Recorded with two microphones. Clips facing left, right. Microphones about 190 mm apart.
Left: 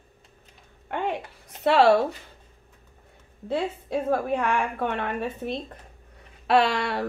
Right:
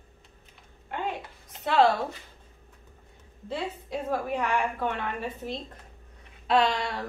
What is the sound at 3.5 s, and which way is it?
A woman's voice, 60° left (ahead or behind).